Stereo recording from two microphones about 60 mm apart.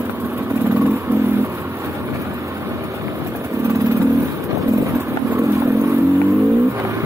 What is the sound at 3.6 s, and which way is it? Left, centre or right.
Vehicle, right.